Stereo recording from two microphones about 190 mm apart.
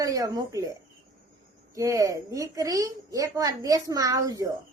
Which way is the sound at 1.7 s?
15° right (ahead or behind).